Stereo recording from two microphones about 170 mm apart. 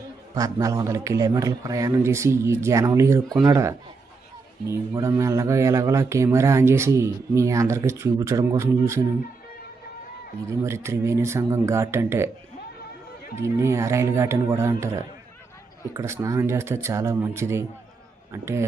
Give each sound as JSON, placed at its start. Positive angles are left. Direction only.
{"t": 0.3, "sound": "speech", "side_deg": -20}
{"t": 10.4, "sound": "speech", "side_deg": -15}
{"t": 13.4, "sound": "a man's voice", "side_deg": -15}